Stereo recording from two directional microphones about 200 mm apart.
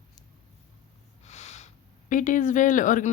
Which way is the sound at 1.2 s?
35° left (ahead or behind).